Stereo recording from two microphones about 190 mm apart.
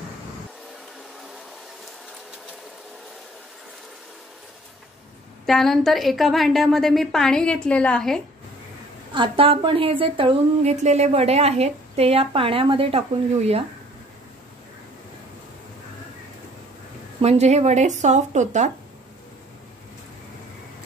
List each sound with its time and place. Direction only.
5.5 s a woman's voice: centre (ahead or behind)
9.1 s a woman's voice: 25° right (ahead or behind)
17.2 s speech: 35° right (ahead or behind)